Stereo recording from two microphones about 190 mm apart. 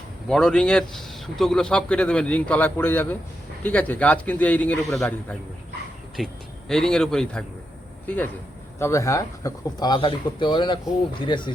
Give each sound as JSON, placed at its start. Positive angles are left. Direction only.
{"t": 0.3, "sound": "a man's voice", "side_deg": 5}